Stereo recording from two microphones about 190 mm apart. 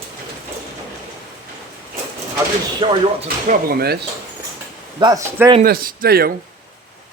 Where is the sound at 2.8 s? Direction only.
25° right (ahead or behind).